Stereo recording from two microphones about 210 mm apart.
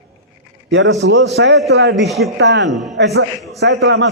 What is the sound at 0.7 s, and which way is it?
A man's voice, 60° right (ahead or behind).